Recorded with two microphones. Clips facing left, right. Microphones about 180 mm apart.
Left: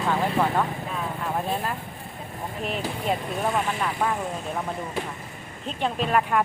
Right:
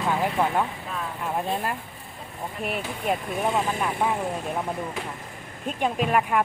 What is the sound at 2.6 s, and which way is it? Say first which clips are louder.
Speech: left 1 dB; 10° right (ahead or behind).